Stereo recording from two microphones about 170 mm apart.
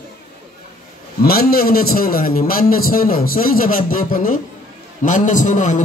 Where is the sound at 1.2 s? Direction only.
65° left (ahead or behind).